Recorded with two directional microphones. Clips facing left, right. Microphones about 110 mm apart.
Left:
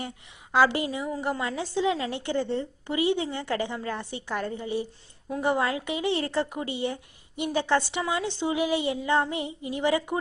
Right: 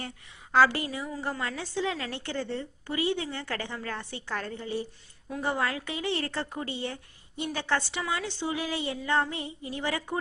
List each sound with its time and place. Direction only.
0.5 s speech: 20° left (ahead or behind)